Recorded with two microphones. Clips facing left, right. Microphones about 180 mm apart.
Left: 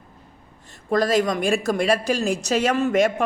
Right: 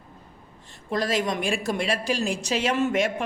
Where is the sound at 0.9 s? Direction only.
40° left (ahead or behind).